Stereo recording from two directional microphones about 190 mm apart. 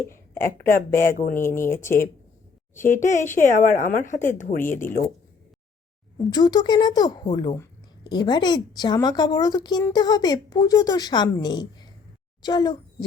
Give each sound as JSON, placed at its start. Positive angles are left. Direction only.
{"t": 0.1, "sound": "speech", "side_deg": 15}
{"t": 1.1, "sound": "a woman's voice", "side_deg": 45}
{"t": 1.4, "sound": "speech", "side_deg": 15}
{"t": 3.0, "sound": "a woman's voice", "side_deg": 40}
{"t": 6.3, "sound": "a woman's voice", "side_deg": 20}